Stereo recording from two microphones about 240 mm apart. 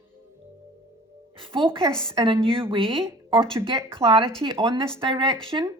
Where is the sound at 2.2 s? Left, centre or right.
Right.